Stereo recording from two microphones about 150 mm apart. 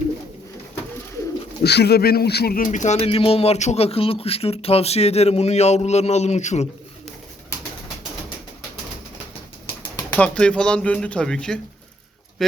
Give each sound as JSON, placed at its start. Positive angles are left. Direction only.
{"t": 1.6, "sound": "speech", "side_deg": 90}
{"t": 10.1, "sound": "speech", "side_deg": 10}